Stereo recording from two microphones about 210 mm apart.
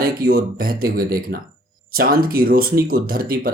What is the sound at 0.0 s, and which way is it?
Speech, 45° right (ahead or behind).